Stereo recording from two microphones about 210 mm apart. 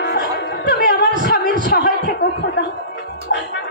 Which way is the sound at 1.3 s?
50° left (ahead or behind).